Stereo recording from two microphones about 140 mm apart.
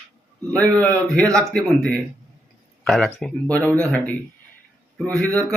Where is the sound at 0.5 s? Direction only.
5° left (ahead or behind).